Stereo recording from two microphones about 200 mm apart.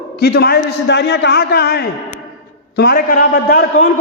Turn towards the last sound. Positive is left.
turn(degrees=45)  # may be behind; listen again after turning